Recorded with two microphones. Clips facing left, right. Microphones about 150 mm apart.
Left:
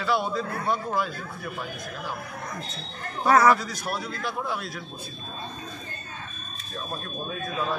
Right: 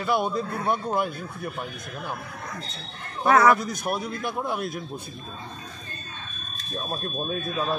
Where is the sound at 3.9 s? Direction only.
20° right (ahead or behind).